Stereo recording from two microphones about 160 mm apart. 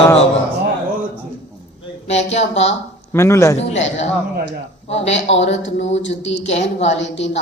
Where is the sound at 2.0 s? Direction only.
45° left (ahead or behind).